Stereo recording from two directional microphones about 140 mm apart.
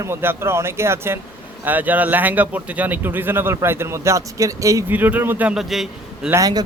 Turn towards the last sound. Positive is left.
turn(degrees=-25)  # may be behind; listen again after turning